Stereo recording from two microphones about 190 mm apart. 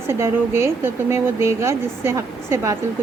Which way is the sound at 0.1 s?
15° right (ahead or behind).